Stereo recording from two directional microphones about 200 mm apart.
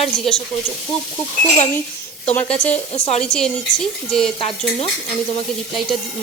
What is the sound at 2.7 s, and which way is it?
Speech, 35° left (ahead or behind).